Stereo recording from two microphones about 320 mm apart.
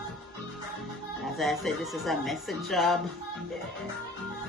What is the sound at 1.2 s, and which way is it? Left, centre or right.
Speech, centre.